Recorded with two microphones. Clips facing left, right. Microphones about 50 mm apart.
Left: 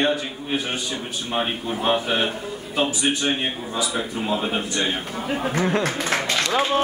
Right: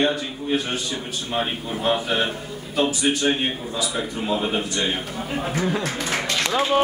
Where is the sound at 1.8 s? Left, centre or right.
Centre.